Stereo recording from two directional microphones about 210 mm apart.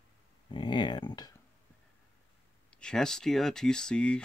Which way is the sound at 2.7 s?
5° left (ahead or behind).